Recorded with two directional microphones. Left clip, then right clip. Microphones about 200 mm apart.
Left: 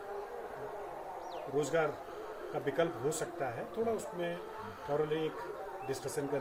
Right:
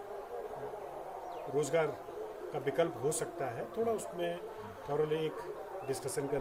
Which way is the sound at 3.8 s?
45° right (ahead or behind).